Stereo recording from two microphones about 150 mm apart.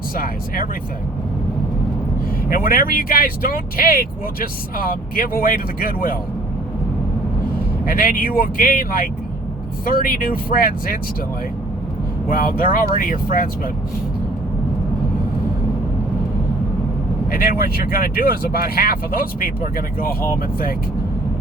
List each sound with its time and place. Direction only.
2.5 s speech: 75° left (ahead or behind)
7.9 s speech: 75° left (ahead or behind)
12.3 s speech: 70° left (ahead or behind)
17.3 s speech: 75° left (ahead or behind)